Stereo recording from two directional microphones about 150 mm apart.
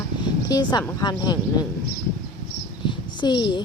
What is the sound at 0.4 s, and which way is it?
Speech, 25° left (ahead or behind).